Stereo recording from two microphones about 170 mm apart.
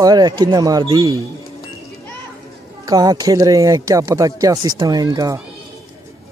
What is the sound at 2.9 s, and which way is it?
Speech, 20° right (ahead or behind).